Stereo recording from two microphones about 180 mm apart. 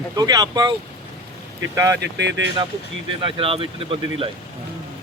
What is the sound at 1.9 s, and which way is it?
Speech, 75° right (ahead or behind).